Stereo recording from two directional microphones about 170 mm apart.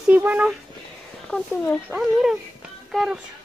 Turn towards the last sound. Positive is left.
turn(degrees=0)  # may be behind; listen again after turning